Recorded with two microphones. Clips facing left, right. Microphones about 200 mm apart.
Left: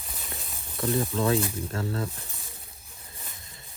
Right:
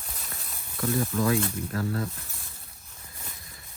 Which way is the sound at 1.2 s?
30° left (ahead or behind).